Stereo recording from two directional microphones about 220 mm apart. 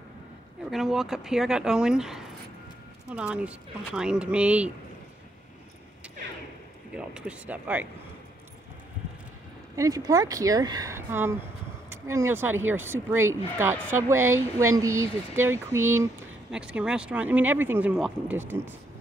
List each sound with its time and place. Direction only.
0.7 s speech: centre (ahead or behind)
6.9 s speech: 5° right (ahead or behind)
9.8 s speech: 15° right (ahead or behind)